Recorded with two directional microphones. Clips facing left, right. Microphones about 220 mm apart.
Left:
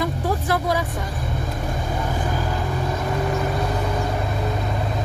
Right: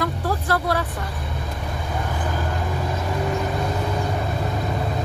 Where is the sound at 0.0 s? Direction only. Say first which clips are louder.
Left 1 dB; 15° left (ahead or behind).